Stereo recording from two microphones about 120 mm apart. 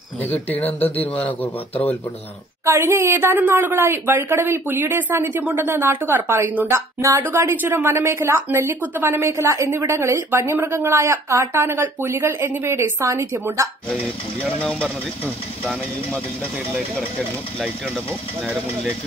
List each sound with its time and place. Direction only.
0.3 s speech: 15° left (ahead or behind)
2.6 s a woman's voice: 20° right (ahead or behind)
14.6 s speech: 10° left (ahead or behind)